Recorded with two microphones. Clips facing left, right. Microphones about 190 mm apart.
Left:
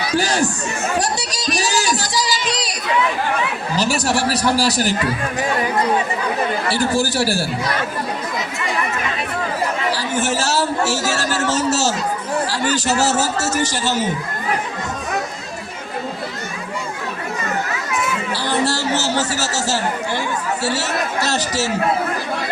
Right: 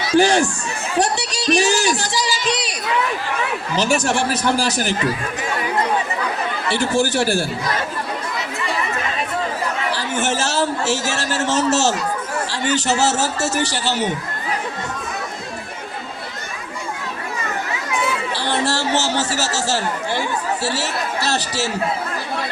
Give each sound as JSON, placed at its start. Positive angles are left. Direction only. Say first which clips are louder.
{"t": 0.2, "sound": "a man's voice", "louder": "right 7 dB", "side_deg": 40}
{"t": 2.5, "sound": "a sound", "louder": "right 1 dB", "side_deg": 40}
{"t": 3.8, "sound": "a man's voice", "louder": "right 1 dB", "side_deg": 35}
{"t": 6.7, "sound": "a man's voice", "louder": "right 3 dB", "side_deg": 35}
{"t": 9.9, "sound": "a man's voice", "louder": "left 1 dB", "side_deg": 40}
{"t": 18.3, "sound": "chatter", "louder": "left 2 dB", "side_deg": 40}
{"t": 20.6, "sound": "a man's voice", "louder": "left 2 dB", "side_deg": 40}